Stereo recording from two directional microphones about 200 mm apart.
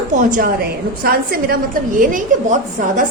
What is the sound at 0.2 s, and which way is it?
A woman's voice, 40° right (ahead or behind).